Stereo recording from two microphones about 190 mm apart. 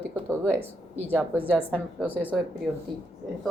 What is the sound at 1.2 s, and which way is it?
A woman's voice, 10° right (ahead or behind).